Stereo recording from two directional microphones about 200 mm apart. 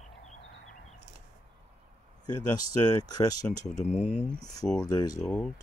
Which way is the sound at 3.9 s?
5° right (ahead or behind).